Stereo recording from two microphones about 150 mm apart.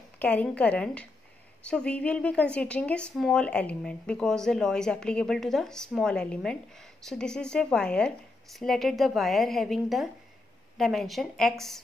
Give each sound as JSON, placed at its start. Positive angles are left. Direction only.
{"t": 0.2, "sound": "a woman's voice", "side_deg": 10}